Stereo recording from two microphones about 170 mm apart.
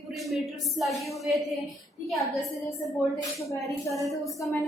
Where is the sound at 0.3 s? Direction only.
Centre (ahead or behind).